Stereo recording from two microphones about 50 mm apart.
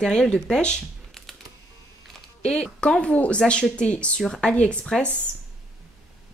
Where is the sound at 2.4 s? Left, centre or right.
Centre.